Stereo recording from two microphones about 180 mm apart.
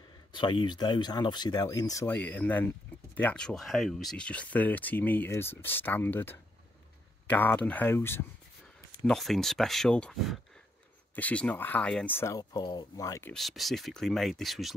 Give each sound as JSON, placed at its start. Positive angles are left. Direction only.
{"t": 0.3, "sound": "speech", "side_deg": 25}
{"t": 9.0, "sound": "speech", "side_deg": 0}
{"t": 13.3, "sound": "speech", "side_deg": 0}